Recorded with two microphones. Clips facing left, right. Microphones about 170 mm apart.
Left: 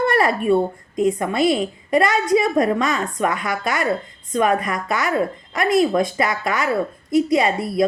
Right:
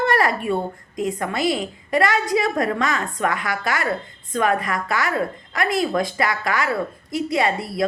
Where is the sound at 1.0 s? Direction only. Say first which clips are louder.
Left 5 dB; 20° left (ahead or behind).